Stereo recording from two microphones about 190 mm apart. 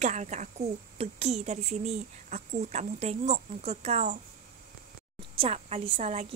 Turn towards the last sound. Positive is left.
turn(degrees=-35)  # may be behind; listen again after turning